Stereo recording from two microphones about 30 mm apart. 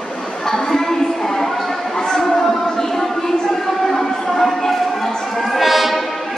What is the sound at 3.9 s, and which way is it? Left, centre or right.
Music, centre.